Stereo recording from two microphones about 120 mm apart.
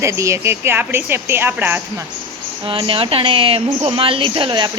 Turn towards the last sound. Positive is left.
turn(degrees=-40)  # may be behind; listen again after turning